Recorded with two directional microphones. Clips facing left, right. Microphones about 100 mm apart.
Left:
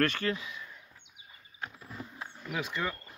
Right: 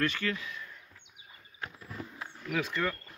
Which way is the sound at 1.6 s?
15° left (ahead or behind).